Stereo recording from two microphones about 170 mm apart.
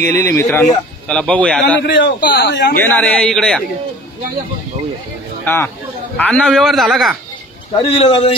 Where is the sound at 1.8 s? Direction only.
70° left (ahead or behind); by 2.8 s 85° left.